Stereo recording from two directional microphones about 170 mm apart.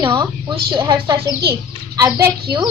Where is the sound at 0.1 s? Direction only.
30° right (ahead or behind).